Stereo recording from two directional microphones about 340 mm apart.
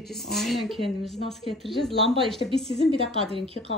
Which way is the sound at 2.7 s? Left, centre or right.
Centre.